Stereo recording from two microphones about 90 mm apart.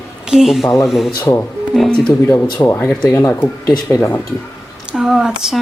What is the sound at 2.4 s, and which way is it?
Speech, 25° left (ahead or behind).